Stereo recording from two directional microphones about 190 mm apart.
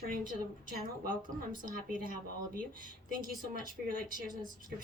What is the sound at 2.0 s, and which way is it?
A woman's voice, 50° right (ahead or behind).